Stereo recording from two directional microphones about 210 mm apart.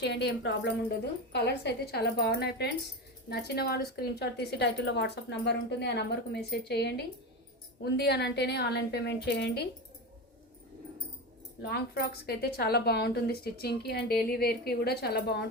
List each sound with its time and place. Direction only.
0.0 s a woman's voice: 55° left (ahead or behind)
11.7 s a woman's voice: 50° left (ahead or behind)